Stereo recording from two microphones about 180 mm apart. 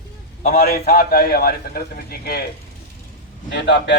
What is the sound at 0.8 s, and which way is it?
Speech, 40° left (ahead or behind).